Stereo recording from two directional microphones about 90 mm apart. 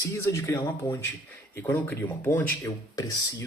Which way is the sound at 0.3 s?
40° left (ahead or behind).